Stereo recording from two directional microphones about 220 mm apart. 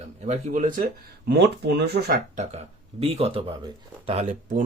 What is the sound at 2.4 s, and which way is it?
Speech, 30° right (ahead or behind).